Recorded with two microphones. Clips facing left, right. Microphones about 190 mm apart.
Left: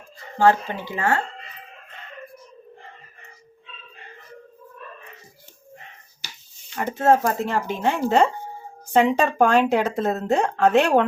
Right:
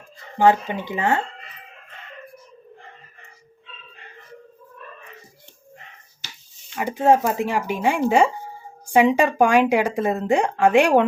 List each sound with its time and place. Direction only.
0.3 s speech: 15° right (ahead or behind)
6.7 s speech: 15° right (ahead or behind)